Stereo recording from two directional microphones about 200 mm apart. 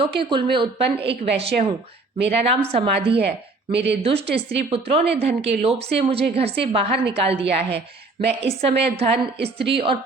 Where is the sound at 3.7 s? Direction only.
60° right (ahead or behind).